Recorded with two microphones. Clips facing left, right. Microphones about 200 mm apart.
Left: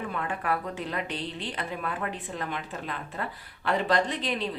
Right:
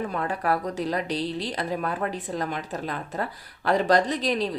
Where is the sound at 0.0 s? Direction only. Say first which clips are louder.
Right 4 dB; 40° right (ahead or behind).